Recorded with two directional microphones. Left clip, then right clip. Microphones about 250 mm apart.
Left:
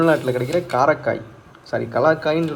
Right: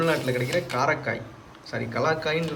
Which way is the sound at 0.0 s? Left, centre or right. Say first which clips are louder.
Left 7 dB; centre.